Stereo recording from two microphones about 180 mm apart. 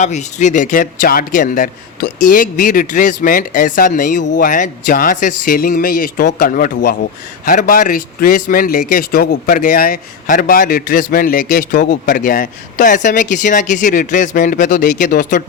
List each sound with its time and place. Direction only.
0.0 s a man's voice: 40° left (ahead or behind)